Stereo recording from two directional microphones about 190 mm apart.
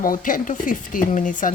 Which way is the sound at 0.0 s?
45° left (ahead or behind).